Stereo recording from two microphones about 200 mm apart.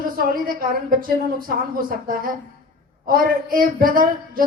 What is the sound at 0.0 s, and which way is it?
Speech, 45° right (ahead or behind).